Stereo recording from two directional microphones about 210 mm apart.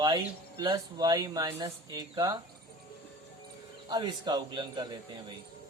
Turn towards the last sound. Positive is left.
turn(degrees=-20)  # may be behind; listen again after turning